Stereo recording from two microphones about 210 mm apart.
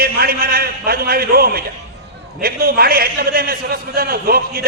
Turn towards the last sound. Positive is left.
turn(degrees=-45)  # may be behind; listen again after turning